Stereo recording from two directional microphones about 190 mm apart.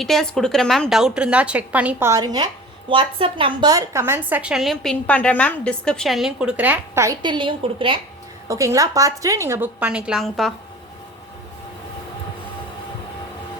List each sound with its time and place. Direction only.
0.0 s a woman's voice: centre (ahead or behind)